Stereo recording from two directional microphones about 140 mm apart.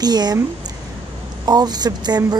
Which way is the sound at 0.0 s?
30° right (ahead or behind).